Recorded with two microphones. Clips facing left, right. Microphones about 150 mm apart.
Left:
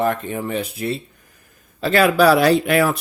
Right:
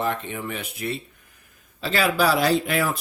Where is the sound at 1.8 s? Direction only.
60° left (ahead or behind).